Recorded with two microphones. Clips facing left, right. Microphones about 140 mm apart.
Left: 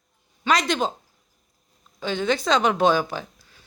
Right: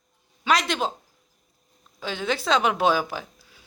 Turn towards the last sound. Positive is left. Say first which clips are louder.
# left 2 dB
turn(degrees=-5)  # may be behind; listen again after turning